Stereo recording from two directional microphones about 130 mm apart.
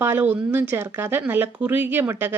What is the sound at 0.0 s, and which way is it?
A woman's voice, 15° right (ahead or behind).